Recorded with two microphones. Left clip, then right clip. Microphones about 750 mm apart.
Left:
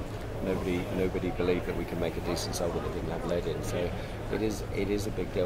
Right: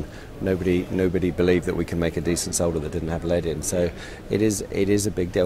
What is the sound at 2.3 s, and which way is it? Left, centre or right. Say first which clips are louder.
Speech: right 7 dB; right.